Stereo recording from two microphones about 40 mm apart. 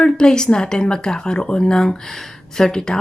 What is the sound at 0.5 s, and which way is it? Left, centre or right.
Speech, left.